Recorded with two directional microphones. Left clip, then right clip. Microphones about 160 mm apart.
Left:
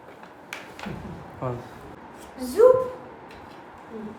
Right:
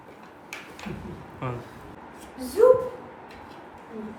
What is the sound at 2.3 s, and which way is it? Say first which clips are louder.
Speech: left 1 dB; centre (ahead or behind).